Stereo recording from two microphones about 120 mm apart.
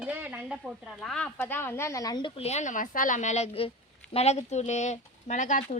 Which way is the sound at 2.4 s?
70° left (ahead or behind).